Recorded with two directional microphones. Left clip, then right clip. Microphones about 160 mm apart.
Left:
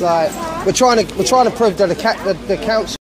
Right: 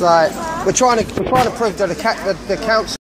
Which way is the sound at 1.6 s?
50° left (ahead or behind).